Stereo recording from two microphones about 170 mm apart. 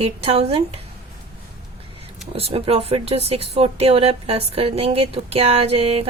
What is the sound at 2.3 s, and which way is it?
Speech, 35° right (ahead or behind).